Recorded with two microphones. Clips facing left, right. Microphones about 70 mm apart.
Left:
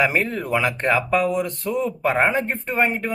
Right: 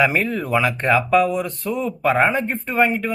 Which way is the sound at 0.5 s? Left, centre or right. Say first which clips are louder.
Right 2 dB; left.